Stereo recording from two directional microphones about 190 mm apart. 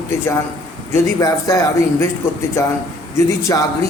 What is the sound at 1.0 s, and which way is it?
Speech, 15° left (ahead or behind).